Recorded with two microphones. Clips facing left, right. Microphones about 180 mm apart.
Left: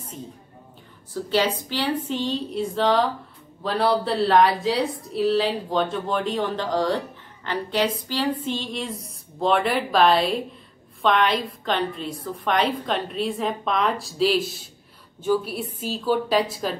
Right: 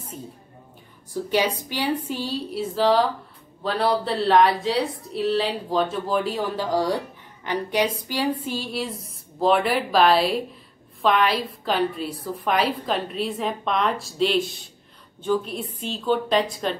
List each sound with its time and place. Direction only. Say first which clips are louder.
1.3 s a woman's voice: left 1 dB; 15° right (ahead or behind); by 16.7 s 5° left (ahead or behind)